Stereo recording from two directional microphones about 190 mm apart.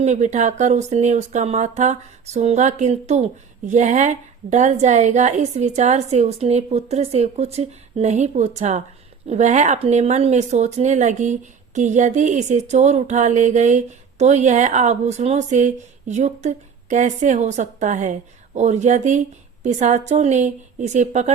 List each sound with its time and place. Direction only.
0.0 s speech: 40° right (ahead or behind)